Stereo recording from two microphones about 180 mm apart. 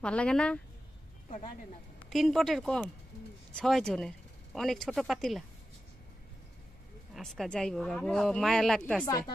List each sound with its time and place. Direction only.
0.0 s speech: 5° left (ahead or behind)
2.0 s speech: centre (ahead or behind)
7.2 s speech: centre (ahead or behind)